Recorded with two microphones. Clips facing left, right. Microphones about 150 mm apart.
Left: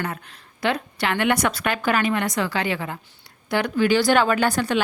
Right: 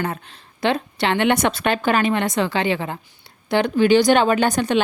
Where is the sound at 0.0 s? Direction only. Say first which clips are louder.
Right 4 dB; 25° right (ahead or behind).